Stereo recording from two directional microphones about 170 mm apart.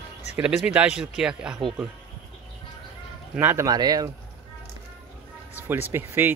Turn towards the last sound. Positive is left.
turn(degrees=-10)  # may be behind; listen again after turning